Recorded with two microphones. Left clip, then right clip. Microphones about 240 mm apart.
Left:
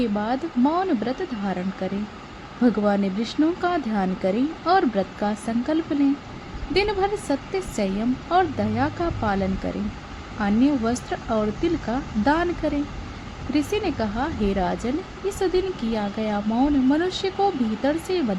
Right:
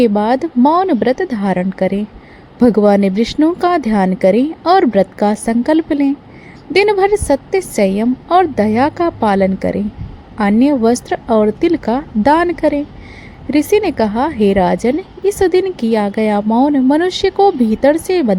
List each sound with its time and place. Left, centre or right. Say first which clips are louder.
0.0 s a woman's voice: right 12 dB; right